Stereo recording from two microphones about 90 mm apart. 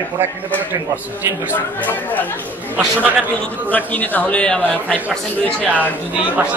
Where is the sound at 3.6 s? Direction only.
20° left (ahead or behind).